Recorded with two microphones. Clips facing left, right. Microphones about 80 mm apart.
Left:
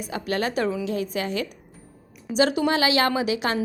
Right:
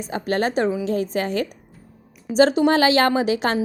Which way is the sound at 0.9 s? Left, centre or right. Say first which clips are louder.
Right 4 dB; right.